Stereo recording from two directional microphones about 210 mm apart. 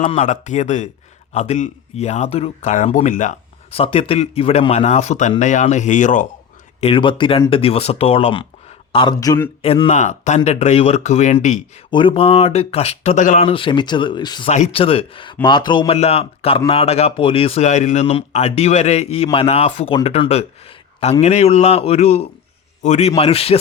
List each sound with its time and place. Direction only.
0.1 s speech: 35° left (ahead or behind)
6.8 s speech: 25° left (ahead or behind)
9.6 s speech: 25° left (ahead or behind)
11.9 s speech: 25° left (ahead or behind)